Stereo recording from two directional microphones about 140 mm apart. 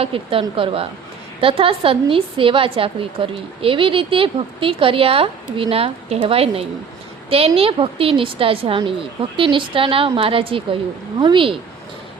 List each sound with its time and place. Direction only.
0.0 s a woman's voice: 40° right (ahead or behind)